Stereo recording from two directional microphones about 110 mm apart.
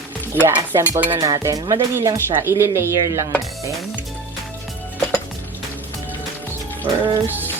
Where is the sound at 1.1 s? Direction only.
45° right (ahead or behind).